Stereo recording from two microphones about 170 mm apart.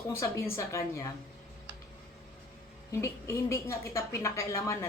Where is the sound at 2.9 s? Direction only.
15° left (ahead or behind).